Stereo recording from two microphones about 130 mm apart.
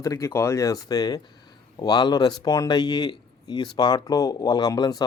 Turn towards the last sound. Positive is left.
turn(degrees=30)  # may be behind; listen again after turning